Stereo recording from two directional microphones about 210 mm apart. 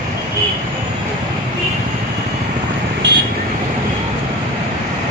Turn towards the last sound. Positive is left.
turn(degrees=-60)  # may be behind; listen again after turning